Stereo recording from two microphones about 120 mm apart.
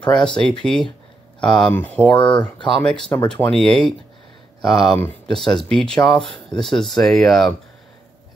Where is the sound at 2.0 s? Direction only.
40° left (ahead or behind).